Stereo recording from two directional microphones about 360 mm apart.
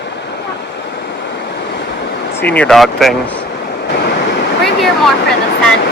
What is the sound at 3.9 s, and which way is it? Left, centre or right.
Waves, left.